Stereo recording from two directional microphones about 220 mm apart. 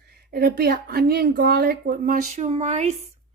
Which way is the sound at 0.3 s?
45° right (ahead or behind).